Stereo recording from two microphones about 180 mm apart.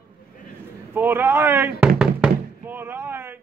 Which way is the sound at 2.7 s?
10° right (ahead or behind).